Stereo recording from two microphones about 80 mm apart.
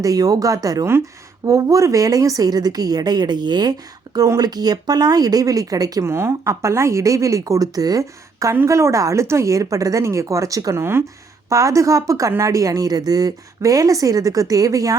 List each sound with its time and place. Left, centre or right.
0.0 s a woman's voice: right
6.1 s a woman's voice: right